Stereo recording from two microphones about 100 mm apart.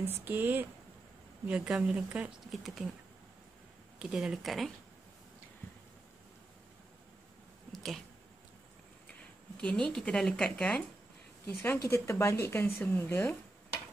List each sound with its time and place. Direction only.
0.0 s speech: 20° right (ahead or behind); by 2.9 s 5° right (ahead or behind)
4.0 s speech: 5° right (ahead or behind)
7.7 s a sound: centre (ahead or behind)
9.6 s speech: 10° left (ahead or behind)
11.6 s speech: 25° left (ahead or behind)